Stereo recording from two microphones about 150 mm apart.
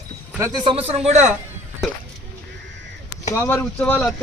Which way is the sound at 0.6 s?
35° right (ahead or behind).